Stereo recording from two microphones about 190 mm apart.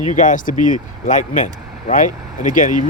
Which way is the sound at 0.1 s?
40° left (ahead or behind).